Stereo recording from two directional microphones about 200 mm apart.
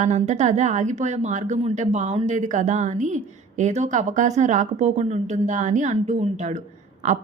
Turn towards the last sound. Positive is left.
turn(degrees=-40)  # may be behind; listen again after turning